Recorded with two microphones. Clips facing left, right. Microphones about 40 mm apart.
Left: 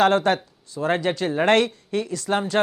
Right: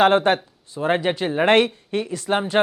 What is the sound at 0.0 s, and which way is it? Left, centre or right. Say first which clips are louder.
Speech: right 2 dB; right.